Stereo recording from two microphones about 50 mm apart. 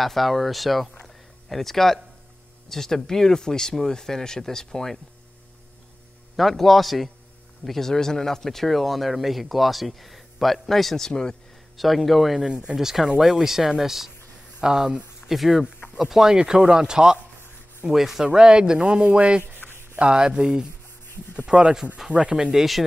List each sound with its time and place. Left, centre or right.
0.0 s speech: centre
1.0 s a sound: centre
2.7 s speech: centre
6.3 s speech: centre
11.7 s speech: centre
12.4 s speech: centre
15.2 s speech: centre
15.6 s speech: right
19.4 s rub: right
20.0 s speech: centre
21.1 s rub: left
21.5 s speech: right
22.3 s speech: centre